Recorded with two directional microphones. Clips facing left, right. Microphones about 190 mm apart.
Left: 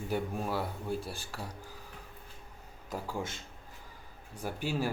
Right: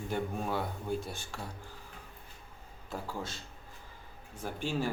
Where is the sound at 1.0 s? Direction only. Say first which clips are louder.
Even; 35° left (ahead or behind).